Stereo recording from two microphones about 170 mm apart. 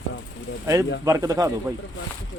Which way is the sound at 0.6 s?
15° right (ahead or behind).